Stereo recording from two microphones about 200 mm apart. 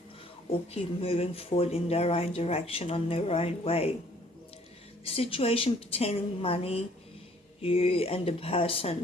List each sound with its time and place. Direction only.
0.7 s speech: 30° left (ahead or behind)
5.0 s speech: 30° left (ahead or behind)